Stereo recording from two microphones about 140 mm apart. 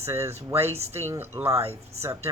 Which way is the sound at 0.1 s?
20° right (ahead or behind).